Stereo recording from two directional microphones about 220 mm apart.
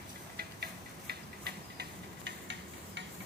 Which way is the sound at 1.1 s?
45° right (ahead or behind).